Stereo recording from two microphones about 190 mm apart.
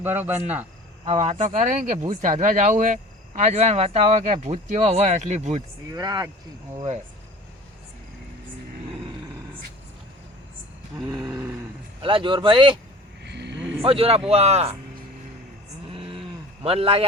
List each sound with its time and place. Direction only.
0.0 s speech: 10° right (ahead or behind)
1.0 s speech: 35° right (ahead or behind)
5.9 s speech: 20° right (ahead or behind)
11.2 s a sound: 15° right (ahead or behind)
12.0 s speech: 25° right (ahead or behind)
13.2 s vehicle: 65° right (ahead or behind)
13.8 s speech: 30° right (ahead or behind)
15.9 s a sound: 30° right (ahead or behind)
16.6 s speech: 30° right (ahead or behind)